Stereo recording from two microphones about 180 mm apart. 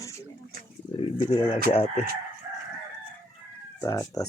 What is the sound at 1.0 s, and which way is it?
Speech, 30° left (ahead or behind).